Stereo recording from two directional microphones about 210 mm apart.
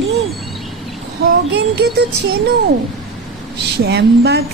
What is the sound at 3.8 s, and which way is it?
Speech, 50° right (ahead or behind).